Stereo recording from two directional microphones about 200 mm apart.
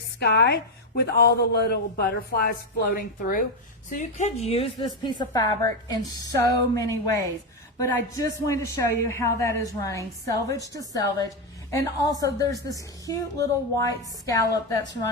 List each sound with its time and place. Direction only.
0.2 s a woman's voice: 55° left (ahead or behind); by 14.8 s 15° left (ahead or behind)